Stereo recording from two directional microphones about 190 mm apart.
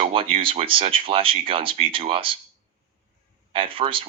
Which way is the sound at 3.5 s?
30° right (ahead or behind).